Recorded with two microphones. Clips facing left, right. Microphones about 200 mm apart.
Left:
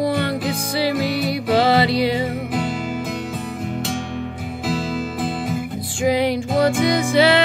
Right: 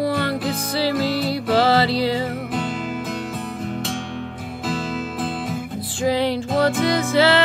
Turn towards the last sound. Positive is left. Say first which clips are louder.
# left 1 dB
turn(degrees=15)  # may be behind; listen again after turning